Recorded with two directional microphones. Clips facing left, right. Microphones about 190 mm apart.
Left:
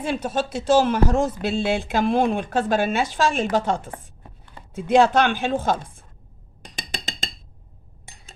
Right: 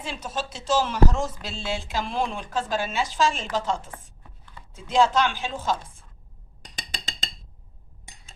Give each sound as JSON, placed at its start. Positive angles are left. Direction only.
{"t": 0.0, "sound": "speech", "side_deg": 55}
{"t": 3.9, "sound": "chopping", "side_deg": 35}
{"t": 4.7, "sound": "speech", "side_deg": 60}